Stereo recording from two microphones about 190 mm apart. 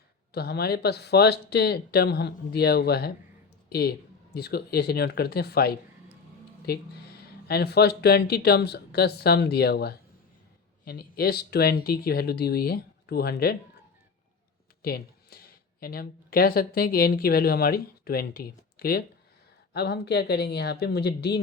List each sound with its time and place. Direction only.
0.3 s speech: 55° left (ahead or behind)
14.8 s speech: 55° left (ahead or behind)